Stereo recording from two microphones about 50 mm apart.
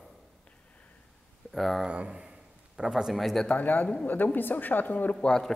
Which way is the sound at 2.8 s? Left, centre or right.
Centre.